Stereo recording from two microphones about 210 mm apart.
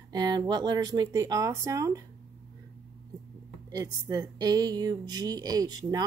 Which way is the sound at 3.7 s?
15° right (ahead or behind).